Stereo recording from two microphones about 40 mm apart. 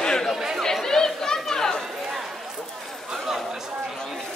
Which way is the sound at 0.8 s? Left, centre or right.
Centre.